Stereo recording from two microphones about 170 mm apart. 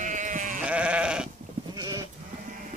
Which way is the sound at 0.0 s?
50° right (ahead or behind).